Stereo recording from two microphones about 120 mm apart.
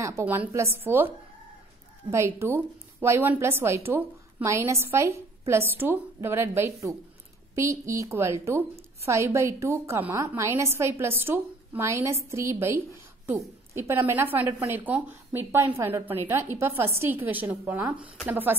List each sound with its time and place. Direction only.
0.0 s a woman's voice: 20° right (ahead or behind)